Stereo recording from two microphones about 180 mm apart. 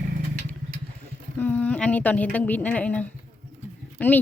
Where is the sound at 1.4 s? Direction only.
10° left (ahead or behind).